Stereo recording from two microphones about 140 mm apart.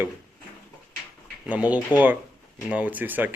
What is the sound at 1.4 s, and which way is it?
Speech, 10° right (ahead or behind).